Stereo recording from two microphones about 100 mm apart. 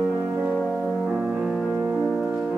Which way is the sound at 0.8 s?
Centre (ahead or behind).